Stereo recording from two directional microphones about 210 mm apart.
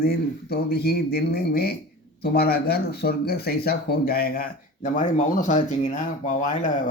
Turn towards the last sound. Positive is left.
turn(degrees=35)  # may be behind; listen again after turning